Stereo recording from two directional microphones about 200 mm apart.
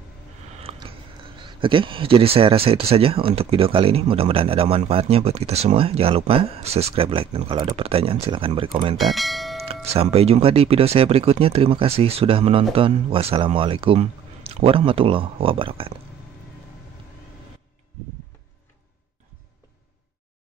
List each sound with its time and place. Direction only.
0.6 s speech: 30° right (ahead or behind)
9.0 s speech: centre (ahead or behind)
9.8 s speech: 30° right (ahead or behind)